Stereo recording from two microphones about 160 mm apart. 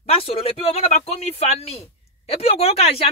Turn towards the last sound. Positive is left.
turn(degrees=40)  # may be behind; listen again after turning